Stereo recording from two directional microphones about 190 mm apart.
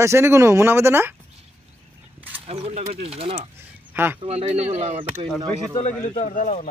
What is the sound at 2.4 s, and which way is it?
Speech, 35° right (ahead or behind).